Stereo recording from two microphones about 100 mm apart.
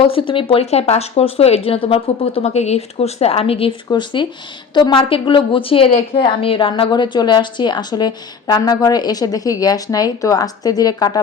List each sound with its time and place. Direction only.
0.0 s speech: 65° left (ahead or behind)
3.8 s a woman's voice: 50° left (ahead or behind)